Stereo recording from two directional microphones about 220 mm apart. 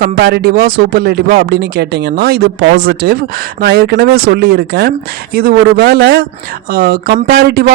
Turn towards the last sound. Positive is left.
turn(degrees=-45)  # may be behind; listen again after turning